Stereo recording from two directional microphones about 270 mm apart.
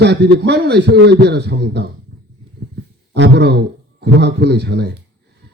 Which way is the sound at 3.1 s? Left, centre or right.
Right.